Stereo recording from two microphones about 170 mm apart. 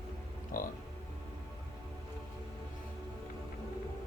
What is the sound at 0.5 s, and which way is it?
Music, 55° left (ahead or behind).